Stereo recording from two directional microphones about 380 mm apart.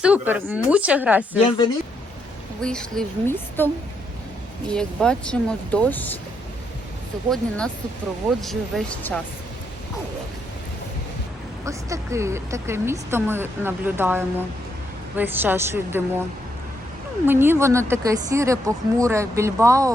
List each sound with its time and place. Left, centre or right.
0.0 s speech: centre
2.6 s speech: centre
4.7 s speech: centre
7.3 s speech: centre
11.6 s speech: centre
17.2 s speech: centre